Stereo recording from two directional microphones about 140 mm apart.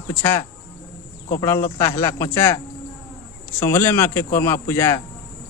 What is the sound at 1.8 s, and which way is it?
Speech, 20° left (ahead or behind).